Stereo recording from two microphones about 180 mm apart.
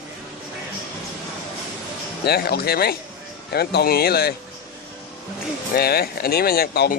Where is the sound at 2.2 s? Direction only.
60° left (ahead or behind).